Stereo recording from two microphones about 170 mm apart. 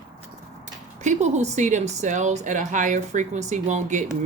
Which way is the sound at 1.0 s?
40° right (ahead or behind).